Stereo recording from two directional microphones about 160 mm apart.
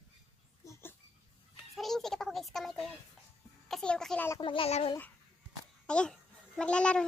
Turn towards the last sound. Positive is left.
turn(degrees=5)  # may be behind; listen again after turning